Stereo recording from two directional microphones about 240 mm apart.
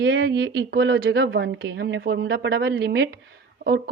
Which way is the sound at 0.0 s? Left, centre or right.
Right.